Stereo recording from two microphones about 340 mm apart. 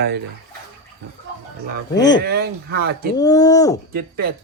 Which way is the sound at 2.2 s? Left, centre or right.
Right.